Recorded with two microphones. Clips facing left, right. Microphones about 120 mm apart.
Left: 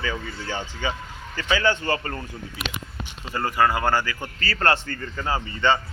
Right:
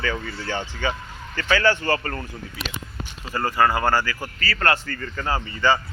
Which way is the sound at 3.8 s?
20° left (ahead or behind).